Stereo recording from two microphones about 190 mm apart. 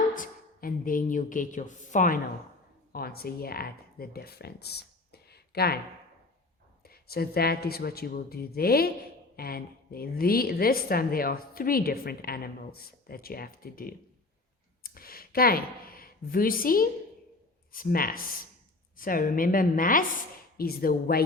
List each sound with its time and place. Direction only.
0.1 s speech: 45° left (ahead or behind)
6.8 s a woman's voice: 55° left (ahead or behind)